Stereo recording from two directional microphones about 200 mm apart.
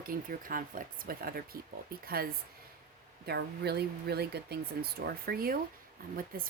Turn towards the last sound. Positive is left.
turn(degrees=-45)  # may be behind; listen again after turning